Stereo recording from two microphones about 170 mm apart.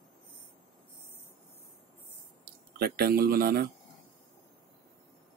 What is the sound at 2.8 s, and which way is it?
Speech, 65° right (ahead or behind).